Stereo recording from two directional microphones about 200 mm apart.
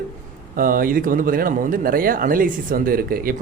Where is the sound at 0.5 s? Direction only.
45° right (ahead or behind).